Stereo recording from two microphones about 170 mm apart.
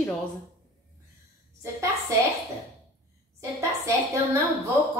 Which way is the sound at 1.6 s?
20° right (ahead or behind).